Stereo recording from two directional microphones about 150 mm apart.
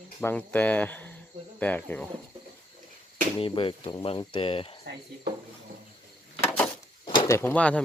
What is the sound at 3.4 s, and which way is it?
Speech, 35° left (ahead or behind).